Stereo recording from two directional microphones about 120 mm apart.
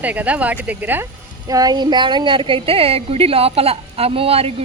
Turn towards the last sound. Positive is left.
turn(degrees=-55)  # may be behind; listen again after turning